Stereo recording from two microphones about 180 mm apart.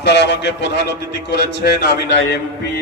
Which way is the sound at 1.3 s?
65° left (ahead or behind).